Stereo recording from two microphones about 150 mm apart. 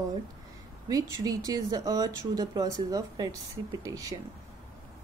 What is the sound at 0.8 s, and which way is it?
Speech, 25° right (ahead or behind).